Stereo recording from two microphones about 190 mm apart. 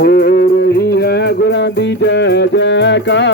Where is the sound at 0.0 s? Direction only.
50° left (ahead or behind).